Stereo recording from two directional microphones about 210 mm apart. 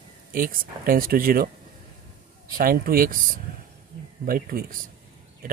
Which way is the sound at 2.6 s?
45° right (ahead or behind).